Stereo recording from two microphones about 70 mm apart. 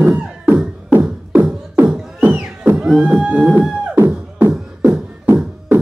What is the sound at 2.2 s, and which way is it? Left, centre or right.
Music, right.